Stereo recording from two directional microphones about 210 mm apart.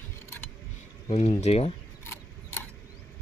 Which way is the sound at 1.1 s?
30° left (ahead or behind).